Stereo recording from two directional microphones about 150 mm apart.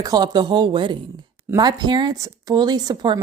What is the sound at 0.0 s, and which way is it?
Speech, 25° right (ahead or behind).